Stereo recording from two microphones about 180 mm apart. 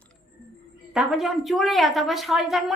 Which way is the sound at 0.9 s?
Centre (ahead or behind).